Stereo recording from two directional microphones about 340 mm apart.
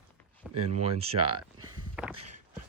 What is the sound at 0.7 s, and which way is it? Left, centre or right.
Speech, centre.